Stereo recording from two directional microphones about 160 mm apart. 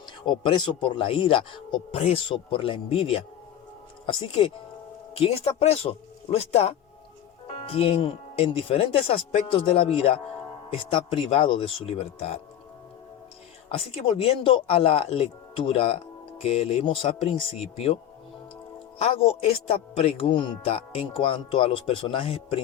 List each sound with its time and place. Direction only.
0.0 s a man's voice: 30° left (ahead or behind)
13.7 s a man's voice: 35° left (ahead or behind)
18.9 s a man's voice: 40° left (ahead or behind)